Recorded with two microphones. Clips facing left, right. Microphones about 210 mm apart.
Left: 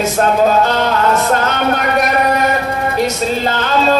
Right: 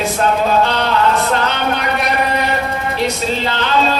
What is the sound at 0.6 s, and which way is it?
Speech, 45° left (ahead or behind).